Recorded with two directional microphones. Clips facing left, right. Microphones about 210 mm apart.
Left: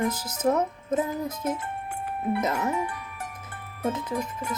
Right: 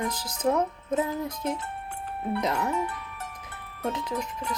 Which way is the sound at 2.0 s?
5° left (ahead or behind).